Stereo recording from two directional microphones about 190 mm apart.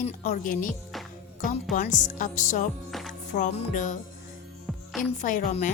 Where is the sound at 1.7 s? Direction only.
40° left (ahead or behind).